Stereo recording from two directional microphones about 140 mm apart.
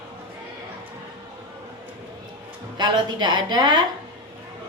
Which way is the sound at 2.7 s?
30° right (ahead or behind).